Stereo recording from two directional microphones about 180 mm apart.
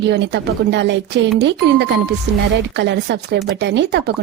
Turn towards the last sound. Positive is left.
turn(degrees=-65)  # may be behind; listen again after turning